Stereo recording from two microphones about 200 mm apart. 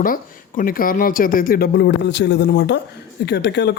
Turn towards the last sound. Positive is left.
turn(degrees=55)  # may be behind; listen again after turning